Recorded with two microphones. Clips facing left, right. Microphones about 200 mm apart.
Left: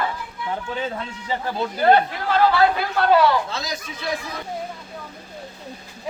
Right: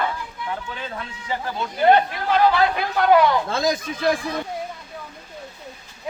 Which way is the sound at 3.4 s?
50° right (ahead or behind).